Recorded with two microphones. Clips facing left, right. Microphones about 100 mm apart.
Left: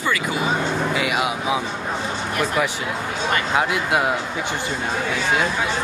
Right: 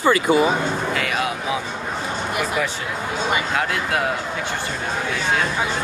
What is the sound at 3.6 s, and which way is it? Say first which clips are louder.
Speech: left 2 dB; 15° left (ahead or behind).